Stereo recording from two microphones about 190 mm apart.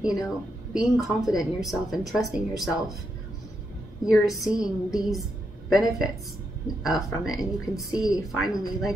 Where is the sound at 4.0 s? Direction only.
Centre (ahead or behind).